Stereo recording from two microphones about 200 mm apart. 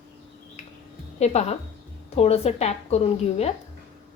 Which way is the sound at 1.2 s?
35° left (ahead or behind).